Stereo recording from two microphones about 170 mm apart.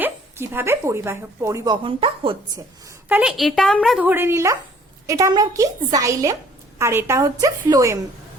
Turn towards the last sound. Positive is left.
turn(degrees=-20)  # may be behind; listen again after turning